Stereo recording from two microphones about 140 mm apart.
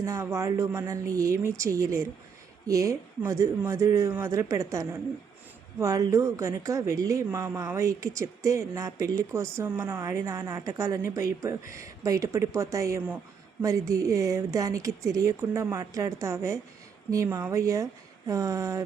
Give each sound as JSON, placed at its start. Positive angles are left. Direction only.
{"t": 0.0, "sound": "speech", "side_deg": -20}